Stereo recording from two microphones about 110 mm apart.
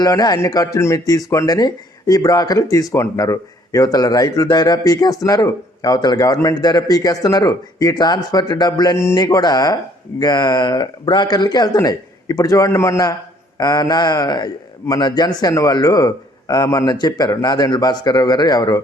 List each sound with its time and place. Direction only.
0.0 s speech: 35° left (ahead or behind)